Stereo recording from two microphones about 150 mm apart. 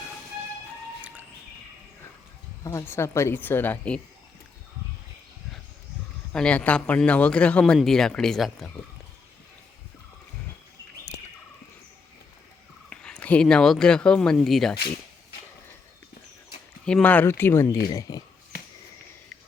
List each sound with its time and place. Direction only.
2.6 s a man's voice: 20° left (ahead or behind)
6.3 s a man's voice: 5° left (ahead or behind)
12.9 s speech: 5° left (ahead or behind)
16.8 s a man's voice: 10° left (ahead or behind); by 18.2 s 25° left (ahead or behind)